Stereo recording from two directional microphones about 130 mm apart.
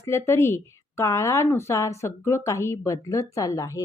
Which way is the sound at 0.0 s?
20° left (ahead or behind).